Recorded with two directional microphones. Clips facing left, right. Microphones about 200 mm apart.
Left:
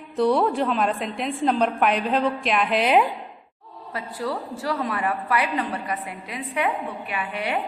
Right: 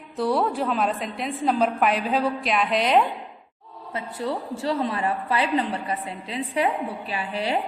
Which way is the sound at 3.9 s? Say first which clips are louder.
Even; 25° right (ahead or behind).